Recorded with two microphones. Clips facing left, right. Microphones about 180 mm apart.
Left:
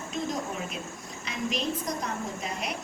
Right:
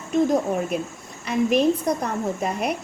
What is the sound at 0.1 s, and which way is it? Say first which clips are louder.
A woman's voice: right 13 dB; 60° right (ahead or behind).